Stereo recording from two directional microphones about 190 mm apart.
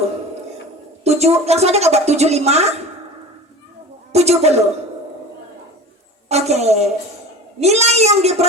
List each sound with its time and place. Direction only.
1.0 s a woman's voice: 35° right (ahead or behind)
4.1 s a woman's voice: 35° right (ahead or behind)
6.2 s a woman's voice: 35° right (ahead or behind)